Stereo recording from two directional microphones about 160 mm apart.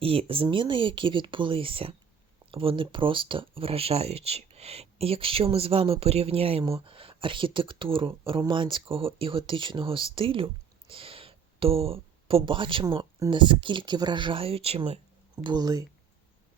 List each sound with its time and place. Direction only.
0.0 s speech: 35° right (ahead or behind)
15.4 s speech: 25° right (ahead or behind)